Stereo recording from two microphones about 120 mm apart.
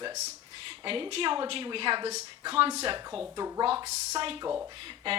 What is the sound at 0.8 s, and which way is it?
A woman's voice, 45° right (ahead or behind).